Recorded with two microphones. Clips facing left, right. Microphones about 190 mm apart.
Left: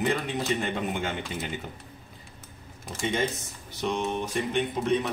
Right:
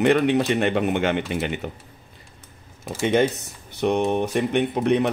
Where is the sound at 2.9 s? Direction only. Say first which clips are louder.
Right 8 dB; 65° right (ahead or behind).